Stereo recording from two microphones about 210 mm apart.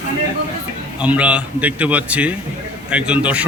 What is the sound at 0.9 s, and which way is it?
A man's voice, 5° right (ahead or behind).